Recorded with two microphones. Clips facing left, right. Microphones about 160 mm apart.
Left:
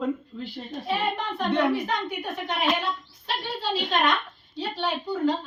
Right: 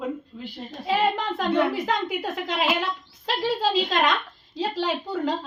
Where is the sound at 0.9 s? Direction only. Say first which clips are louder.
Right 5 dB; 90° right.